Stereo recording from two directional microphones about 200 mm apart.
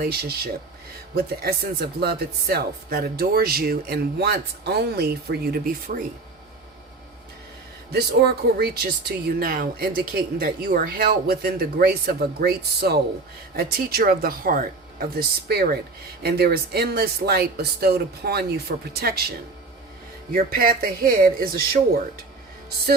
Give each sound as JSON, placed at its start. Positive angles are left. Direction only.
{"t": 0.0, "sound": "speech", "side_deg": -50}
{"t": 7.9, "sound": "speech", "side_deg": -55}
{"t": 20.3, "sound": "speech", "side_deg": -45}